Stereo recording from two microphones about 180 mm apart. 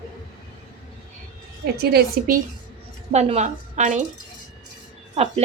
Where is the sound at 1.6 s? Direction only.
60° right (ahead or behind).